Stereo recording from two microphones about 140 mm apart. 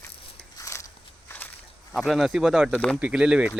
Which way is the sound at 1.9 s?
Centre (ahead or behind).